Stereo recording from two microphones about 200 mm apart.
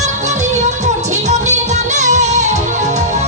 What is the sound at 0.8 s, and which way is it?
Music, 35° right (ahead or behind).